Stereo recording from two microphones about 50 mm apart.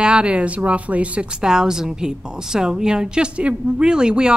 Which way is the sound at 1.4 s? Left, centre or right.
Centre.